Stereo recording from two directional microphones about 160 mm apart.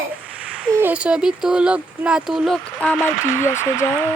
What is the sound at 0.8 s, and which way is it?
Speech, 10° right (ahead or behind).